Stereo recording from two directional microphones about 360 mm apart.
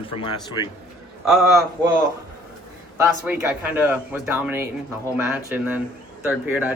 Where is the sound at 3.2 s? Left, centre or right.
Centre.